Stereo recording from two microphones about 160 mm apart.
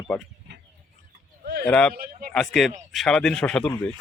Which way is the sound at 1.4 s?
90° right.